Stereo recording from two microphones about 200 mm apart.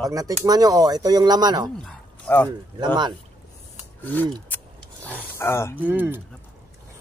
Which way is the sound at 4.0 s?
10° left (ahead or behind).